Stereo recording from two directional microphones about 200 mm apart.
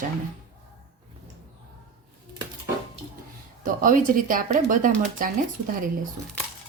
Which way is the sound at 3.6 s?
40° right (ahead or behind).